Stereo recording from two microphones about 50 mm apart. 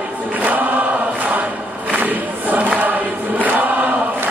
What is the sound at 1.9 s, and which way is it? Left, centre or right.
Choir, right.